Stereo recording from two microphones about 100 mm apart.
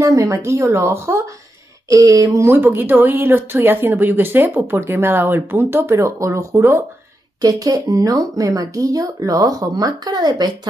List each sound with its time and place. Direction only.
0.0 s speech: 35° right (ahead or behind)